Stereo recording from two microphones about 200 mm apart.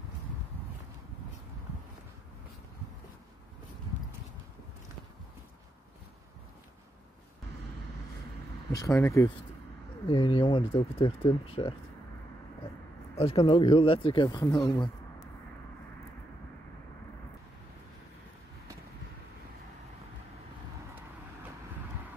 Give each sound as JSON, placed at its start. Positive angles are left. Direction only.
{"t": 8.7, "sound": "speech", "side_deg": 15}
{"t": 13.1, "sound": "speech", "side_deg": 30}